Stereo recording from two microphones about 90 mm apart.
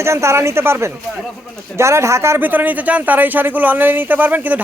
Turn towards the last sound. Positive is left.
turn(degrees=-20)  # may be behind; listen again after turning